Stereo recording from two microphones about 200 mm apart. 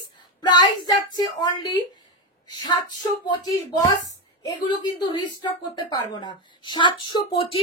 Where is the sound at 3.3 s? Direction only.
20° left (ahead or behind).